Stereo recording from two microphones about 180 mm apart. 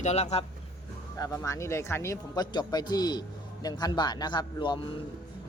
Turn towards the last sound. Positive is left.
turn(degrees=25)  # may be behind; listen again after turning